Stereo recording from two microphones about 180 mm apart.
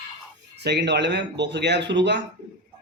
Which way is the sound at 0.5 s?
70° right (ahead or behind).